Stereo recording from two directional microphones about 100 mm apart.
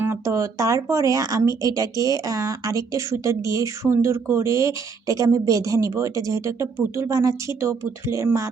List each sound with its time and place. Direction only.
0.0 s a woman's voice: 25° right (ahead or behind)